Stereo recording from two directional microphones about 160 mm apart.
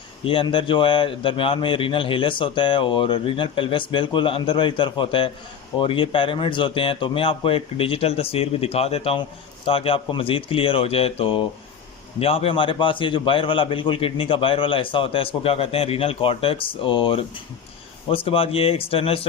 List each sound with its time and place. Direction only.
0.3 s a man's voice: 35° left (ahead or behind)